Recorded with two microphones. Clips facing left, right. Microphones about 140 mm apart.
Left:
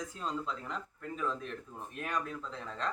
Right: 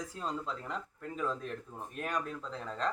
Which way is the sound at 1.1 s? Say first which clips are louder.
Right 1 dB; 35° right (ahead or behind).